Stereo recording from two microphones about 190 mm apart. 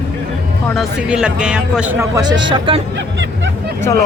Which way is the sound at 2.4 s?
25° right (ahead or behind).